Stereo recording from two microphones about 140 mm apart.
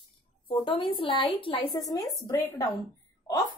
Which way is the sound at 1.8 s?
25° left (ahead or behind).